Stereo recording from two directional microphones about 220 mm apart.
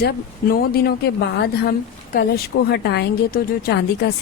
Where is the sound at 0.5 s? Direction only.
45° left (ahead or behind).